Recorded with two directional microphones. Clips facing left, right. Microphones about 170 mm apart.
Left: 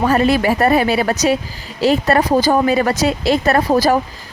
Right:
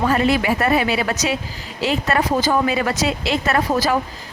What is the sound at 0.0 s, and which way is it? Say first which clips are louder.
Speech: left 3 dB; 40° left (ahead or behind).